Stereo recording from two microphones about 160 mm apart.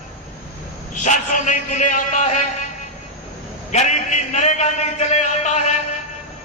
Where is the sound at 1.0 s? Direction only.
50° left (ahead or behind).